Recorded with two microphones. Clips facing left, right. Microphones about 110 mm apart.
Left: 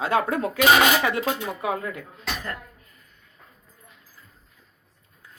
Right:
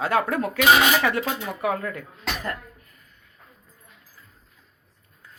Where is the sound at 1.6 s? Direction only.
20° left (ahead or behind).